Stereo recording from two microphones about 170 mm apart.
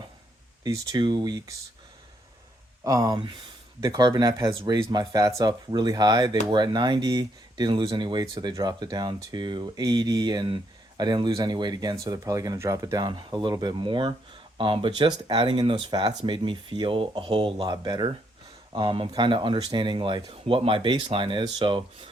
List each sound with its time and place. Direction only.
0.6 s speech: 25° right (ahead or behind)
2.8 s speech: 20° right (ahead or behind)